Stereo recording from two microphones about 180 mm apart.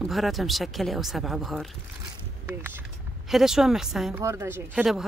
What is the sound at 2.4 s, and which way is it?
Speech, 10° right (ahead or behind).